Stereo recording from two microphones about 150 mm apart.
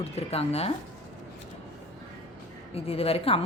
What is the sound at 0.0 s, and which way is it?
Speech, 45° left (ahead or behind).